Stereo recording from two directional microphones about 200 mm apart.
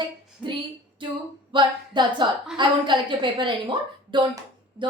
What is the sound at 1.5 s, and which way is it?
A woman's voice, 25° right (ahead or behind).